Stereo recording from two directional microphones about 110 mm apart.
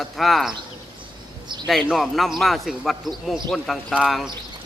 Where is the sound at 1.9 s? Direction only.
Centre (ahead or behind).